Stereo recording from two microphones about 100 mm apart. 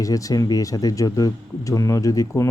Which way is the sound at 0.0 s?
35° left (ahead or behind).